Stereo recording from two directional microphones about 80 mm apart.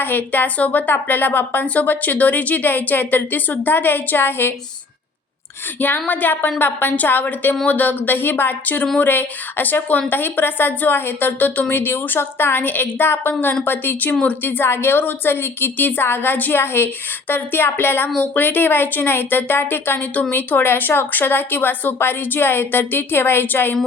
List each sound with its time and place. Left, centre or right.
0.0 s a woman's voice: left
5.8 s a woman's voice: left